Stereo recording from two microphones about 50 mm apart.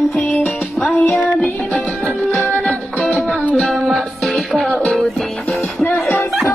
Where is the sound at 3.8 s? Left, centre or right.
Centre.